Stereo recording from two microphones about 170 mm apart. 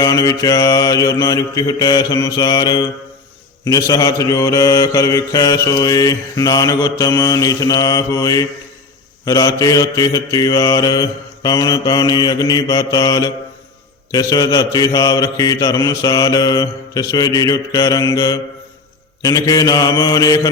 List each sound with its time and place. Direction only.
0.0 s mantra: 20° left (ahead or behind)